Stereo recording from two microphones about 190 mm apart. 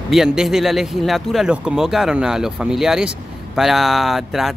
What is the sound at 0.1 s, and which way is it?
Speech, centre (ahead or behind).